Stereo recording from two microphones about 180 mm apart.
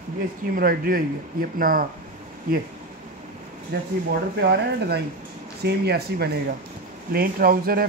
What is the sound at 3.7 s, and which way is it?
Speech, 65° right (ahead or behind).